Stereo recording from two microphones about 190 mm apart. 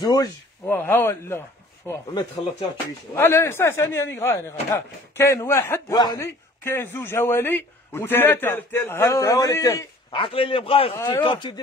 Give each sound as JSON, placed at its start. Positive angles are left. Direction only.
{"t": 0.0, "sound": "speech", "side_deg": 20}
{"t": 3.2, "sound": "speech", "side_deg": 15}